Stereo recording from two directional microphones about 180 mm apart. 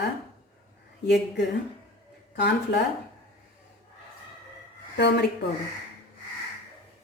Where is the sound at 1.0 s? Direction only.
70° left (ahead or behind).